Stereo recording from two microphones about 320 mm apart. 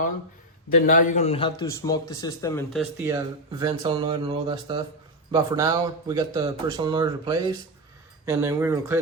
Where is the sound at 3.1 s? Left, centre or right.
Centre.